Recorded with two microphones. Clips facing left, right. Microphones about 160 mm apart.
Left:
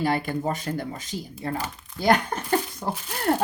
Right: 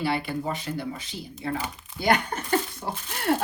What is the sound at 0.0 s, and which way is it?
Speech, 45° left (ahead or behind).